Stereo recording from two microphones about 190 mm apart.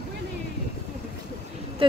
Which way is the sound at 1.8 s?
25° right (ahead or behind).